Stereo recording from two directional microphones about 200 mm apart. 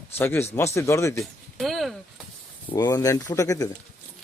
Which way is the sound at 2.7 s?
20° left (ahead or behind).